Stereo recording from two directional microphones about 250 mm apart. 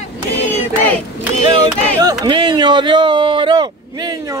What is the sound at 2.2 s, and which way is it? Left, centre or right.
Speech, centre.